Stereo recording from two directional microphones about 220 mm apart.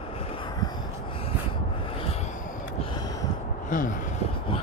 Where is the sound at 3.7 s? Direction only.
35° left (ahead or behind).